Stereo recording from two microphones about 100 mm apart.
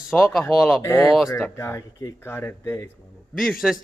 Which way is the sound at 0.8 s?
30° left (ahead or behind).